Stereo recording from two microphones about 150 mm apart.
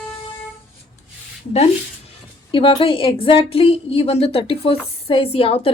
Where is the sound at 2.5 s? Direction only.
35° left (ahead or behind).